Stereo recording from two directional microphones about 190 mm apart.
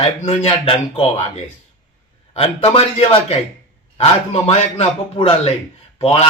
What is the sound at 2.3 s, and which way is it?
Speech, 30° left (ahead or behind).